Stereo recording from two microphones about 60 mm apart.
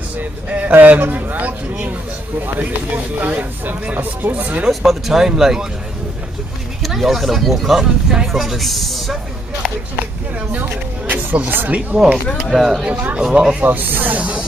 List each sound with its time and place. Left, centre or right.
0.2 s speech: right
3.2 s speech: right
4.6 s speech: centre
6.8 s speech: centre
10.7 s a sound: right
11.3 s speech: right
11.9 s speech: centre
12.8 s speech: right
13.6 s speech: right